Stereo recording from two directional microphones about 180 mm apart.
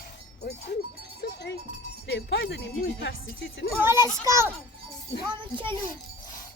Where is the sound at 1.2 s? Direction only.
70° left (ahead or behind).